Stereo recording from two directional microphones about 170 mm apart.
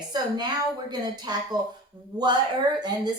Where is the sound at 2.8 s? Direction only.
25° right (ahead or behind).